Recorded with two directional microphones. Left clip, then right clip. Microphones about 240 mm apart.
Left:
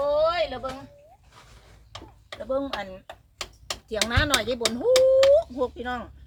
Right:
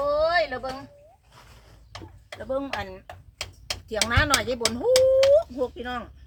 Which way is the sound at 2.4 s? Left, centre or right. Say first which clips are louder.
Left 1 dB; centre.